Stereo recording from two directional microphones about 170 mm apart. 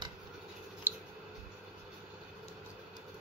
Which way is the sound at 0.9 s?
10° right (ahead or behind).